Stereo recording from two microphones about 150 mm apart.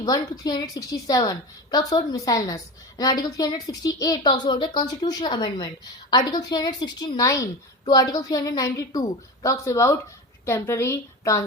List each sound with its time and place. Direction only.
0.0 s a woman's voice: 25° left (ahead or behind)